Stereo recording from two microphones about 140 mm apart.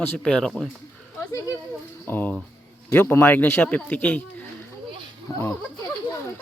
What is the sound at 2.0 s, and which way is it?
Speech, 15° left (ahead or behind).